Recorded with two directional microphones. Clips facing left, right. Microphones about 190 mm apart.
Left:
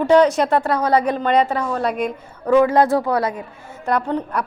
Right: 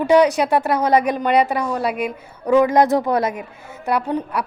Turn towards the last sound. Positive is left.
turn(degrees=-10)  # may be behind; listen again after turning